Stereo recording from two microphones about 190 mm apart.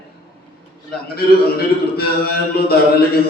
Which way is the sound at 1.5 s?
55° left (ahead or behind).